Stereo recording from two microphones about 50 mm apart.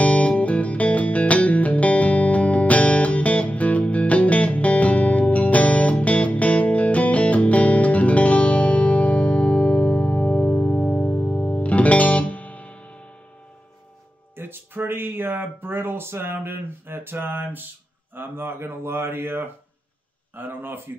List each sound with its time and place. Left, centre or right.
0.0 s music: left
14.3 s a sound: right
18.1 s speech: right